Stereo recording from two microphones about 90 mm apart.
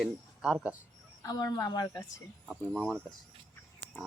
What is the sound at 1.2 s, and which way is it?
Speech, 40° left (ahead or behind).